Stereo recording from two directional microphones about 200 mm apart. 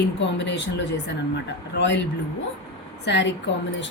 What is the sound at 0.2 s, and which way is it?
Speech, 60° left (ahead or behind).